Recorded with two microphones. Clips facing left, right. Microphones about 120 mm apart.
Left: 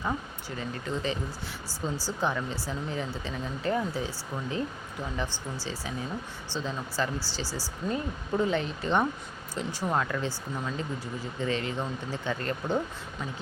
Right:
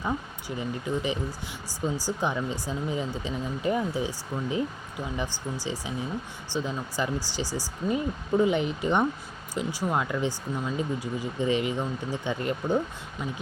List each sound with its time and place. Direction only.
0.4 s speech: 15° right (ahead or behind)